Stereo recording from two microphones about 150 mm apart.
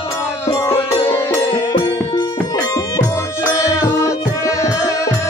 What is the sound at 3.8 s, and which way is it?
Music, 20° left (ahead or behind).